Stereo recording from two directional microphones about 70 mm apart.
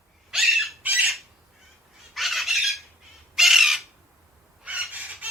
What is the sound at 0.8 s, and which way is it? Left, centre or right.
Squawk, right.